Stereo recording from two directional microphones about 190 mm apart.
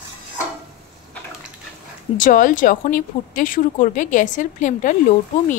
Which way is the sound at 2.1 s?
45° left (ahead or behind).